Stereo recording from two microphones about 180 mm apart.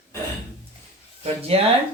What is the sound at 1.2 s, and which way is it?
Speech, 35° right (ahead or behind).